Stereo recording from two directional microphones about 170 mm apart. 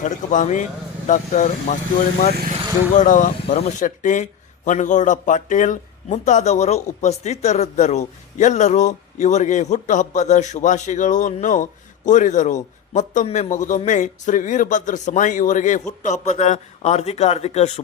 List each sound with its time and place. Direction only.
0.0 s speech: 50° left (ahead or behind)